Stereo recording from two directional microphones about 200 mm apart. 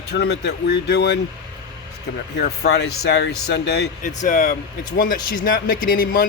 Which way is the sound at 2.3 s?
55° left (ahead or behind).